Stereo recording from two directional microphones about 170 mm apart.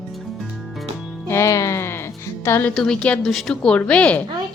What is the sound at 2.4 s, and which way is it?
Speech, 15° left (ahead or behind).